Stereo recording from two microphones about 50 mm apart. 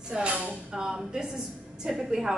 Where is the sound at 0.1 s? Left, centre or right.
Right.